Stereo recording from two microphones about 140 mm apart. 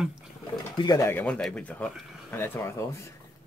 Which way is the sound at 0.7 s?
30° left (ahead or behind).